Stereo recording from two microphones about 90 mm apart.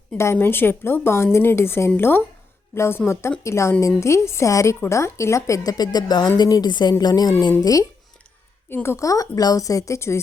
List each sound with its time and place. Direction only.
0.2 s a woman's voice: 30° left (ahead or behind)
8.7 s a woman's voice: 25° left (ahead or behind)